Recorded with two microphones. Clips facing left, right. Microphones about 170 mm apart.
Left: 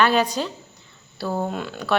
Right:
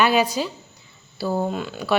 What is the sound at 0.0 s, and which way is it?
A woman's voice, 10° right (ahead or behind).